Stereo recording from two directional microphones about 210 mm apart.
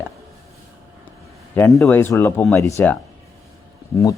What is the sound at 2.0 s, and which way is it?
Speech, 10° left (ahead or behind).